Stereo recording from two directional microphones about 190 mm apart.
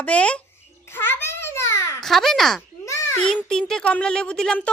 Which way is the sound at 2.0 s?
Centre (ahead or behind).